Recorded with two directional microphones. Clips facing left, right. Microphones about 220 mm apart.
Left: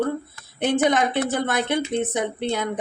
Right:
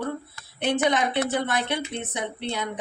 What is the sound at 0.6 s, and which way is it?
Speech, 50° left (ahead or behind).